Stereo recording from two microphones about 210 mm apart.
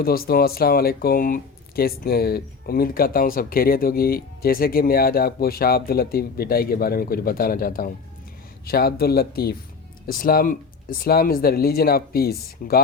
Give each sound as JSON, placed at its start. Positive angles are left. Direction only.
{"t": 0.0, "sound": "speech", "side_deg": 45}